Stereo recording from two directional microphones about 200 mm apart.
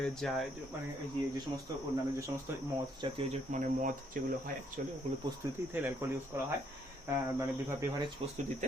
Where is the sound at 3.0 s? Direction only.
25° right (ahead or behind).